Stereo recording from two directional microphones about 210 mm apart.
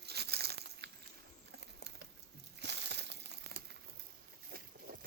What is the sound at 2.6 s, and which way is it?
Crumpling, 55° right (ahead or behind).